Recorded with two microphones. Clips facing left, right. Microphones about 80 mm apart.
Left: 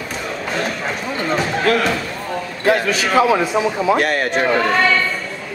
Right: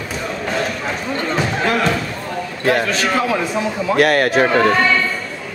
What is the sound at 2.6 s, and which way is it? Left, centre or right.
A man's voice, centre.